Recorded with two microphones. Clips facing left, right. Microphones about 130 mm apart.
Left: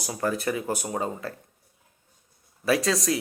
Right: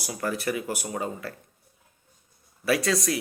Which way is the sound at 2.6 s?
20° left (ahead or behind).